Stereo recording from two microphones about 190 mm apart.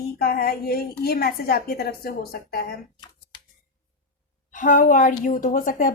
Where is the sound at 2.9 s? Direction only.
25° left (ahead or behind).